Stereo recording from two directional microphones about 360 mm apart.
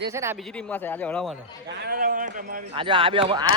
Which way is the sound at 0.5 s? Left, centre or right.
Centre.